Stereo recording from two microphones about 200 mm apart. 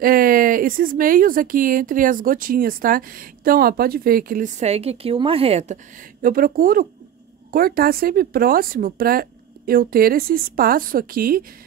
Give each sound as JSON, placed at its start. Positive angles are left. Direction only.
{"t": 0.0, "sound": "speech", "side_deg": -45}
{"t": 6.2, "sound": "speech", "side_deg": -45}